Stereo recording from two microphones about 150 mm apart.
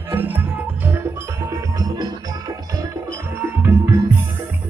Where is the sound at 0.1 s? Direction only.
15° right (ahead or behind).